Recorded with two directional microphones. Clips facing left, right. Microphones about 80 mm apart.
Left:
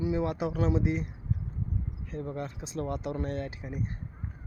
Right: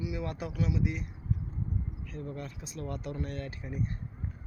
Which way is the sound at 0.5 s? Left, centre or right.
Left.